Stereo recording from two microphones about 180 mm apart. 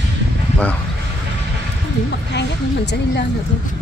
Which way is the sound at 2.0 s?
70° left (ahead or behind).